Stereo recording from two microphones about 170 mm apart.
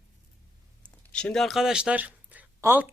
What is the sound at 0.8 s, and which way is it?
Speech, 5° left (ahead or behind).